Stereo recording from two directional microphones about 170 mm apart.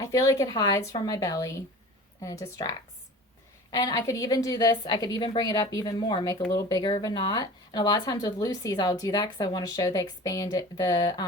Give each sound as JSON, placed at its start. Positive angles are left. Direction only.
{"t": 0.0, "sound": "a woman's voice", "side_deg": 20}